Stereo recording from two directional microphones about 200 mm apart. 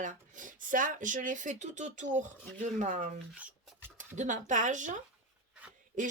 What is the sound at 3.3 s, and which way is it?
Speech, 5° right (ahead or behind).